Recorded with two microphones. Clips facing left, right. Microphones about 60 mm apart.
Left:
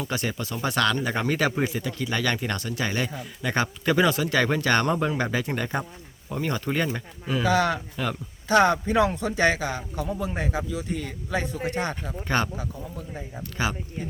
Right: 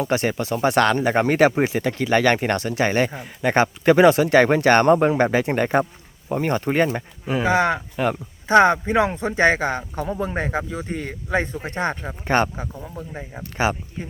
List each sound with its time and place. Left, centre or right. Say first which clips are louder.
0.0 s speech: right 7 dB; right